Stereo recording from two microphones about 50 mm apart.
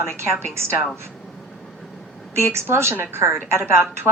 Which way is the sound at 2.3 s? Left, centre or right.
Right.